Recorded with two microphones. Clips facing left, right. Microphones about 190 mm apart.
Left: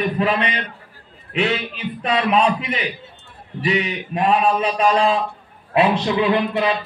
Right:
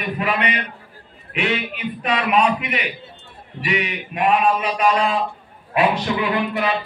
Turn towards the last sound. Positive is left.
turn(degrees=25)  # may be behind; listen again after turning